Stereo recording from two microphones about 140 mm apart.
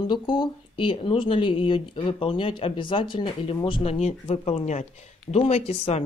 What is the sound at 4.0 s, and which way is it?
Speech, 50° left (ahead or behind).